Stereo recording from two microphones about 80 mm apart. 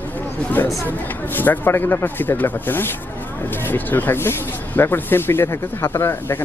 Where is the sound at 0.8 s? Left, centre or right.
Left.